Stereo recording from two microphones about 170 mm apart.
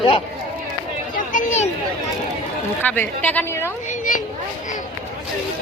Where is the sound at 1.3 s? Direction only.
40° left (ahead or behind).